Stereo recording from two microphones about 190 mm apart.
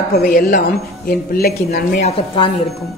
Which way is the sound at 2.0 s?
30° left (ahead or behind).